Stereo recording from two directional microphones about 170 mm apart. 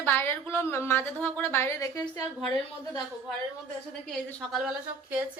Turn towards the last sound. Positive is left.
turn(degrees=-5)  # may be behind; listen again after turning